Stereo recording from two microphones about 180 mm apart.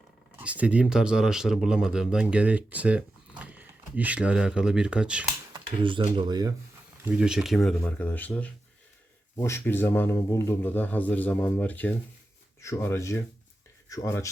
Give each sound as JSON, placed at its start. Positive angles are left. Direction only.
{"t": 0.3, "sound": "speech", "side_deg": -10}
{"t": 5.5, "sound": "speech", "side_deg": -30}
{"t": 7.0, "sound": "speech", "side_deg": -5}